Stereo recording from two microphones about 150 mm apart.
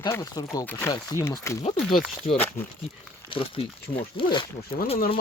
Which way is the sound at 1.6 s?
35° left (ahead or behind).